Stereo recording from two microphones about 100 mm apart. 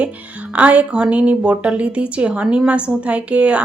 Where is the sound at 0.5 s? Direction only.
15° right (ahead or behind).